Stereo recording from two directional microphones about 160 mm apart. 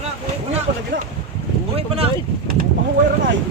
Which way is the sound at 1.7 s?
40° right (ahead or behind).